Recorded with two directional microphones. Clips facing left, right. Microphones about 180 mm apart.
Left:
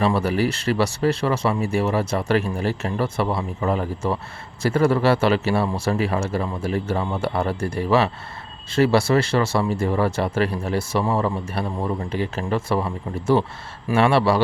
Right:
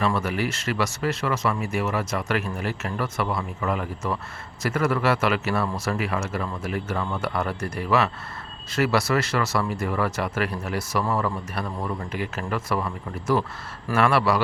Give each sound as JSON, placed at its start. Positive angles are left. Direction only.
{"t": 0.0, "sound": "a man's voice", "side_deg": 30}